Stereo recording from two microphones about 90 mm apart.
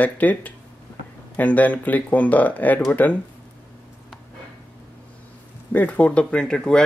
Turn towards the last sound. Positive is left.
turn(degrees=10)  # may be behind; listen again after turning